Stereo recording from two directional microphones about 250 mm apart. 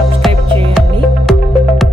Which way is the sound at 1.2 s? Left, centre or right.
Centre.